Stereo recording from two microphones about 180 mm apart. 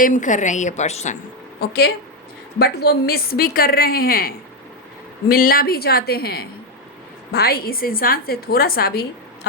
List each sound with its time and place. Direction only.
0.0 s a woman's voice: 45° left (ahead or behind)
2.6 s a woman's voice: 60° left (ahead or behind)